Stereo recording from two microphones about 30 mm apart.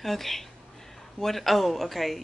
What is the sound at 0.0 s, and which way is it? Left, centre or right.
Speech, centre.